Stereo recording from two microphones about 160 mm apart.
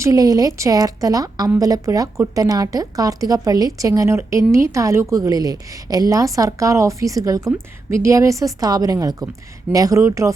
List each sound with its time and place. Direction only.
0.0 s a woman's voice: 20° right (ahead or behind)